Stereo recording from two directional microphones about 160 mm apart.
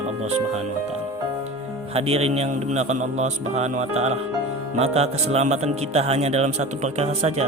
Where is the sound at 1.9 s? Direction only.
40° right (ahead or behind).